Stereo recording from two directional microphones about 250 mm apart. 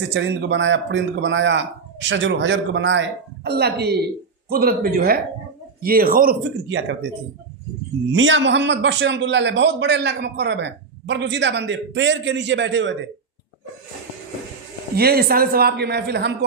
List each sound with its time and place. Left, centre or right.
0.1 s a man's voice: right
6.7 s a man's voice: right
8.1 s a man's voice: right
14.9 s speech: right